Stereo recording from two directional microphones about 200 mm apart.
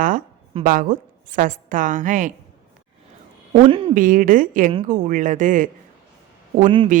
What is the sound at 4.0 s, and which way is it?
A woman's voice, 40° right (ahead or behind).